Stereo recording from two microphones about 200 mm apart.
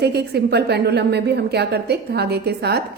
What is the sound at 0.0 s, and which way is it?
A woman's voice, 55° right (ahead or behind).